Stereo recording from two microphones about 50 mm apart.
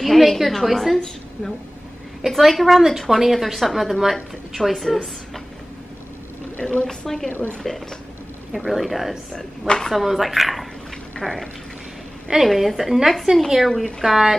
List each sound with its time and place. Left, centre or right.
0.0 s a woman's voice: centre
6.5 s a woman's voice: left
6.9 s speech: centre
8.5 s a woman's voice: centre
9.3 s speech: centre
9.9 s a woman's voice: centre
12.4 s a woman's voice: centre